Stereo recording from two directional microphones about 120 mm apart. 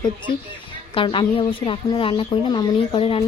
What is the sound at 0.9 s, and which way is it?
A woman's voice, 45° left (ahead or behind).